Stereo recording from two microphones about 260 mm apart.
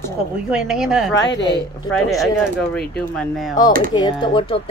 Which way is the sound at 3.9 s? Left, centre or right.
Centre.